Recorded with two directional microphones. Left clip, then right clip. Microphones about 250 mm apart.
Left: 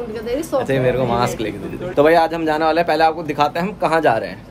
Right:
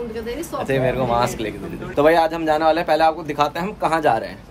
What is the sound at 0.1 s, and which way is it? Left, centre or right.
Speech, centre.